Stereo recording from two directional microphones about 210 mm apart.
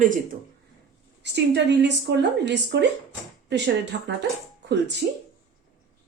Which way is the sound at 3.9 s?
55° right (ahead or behind).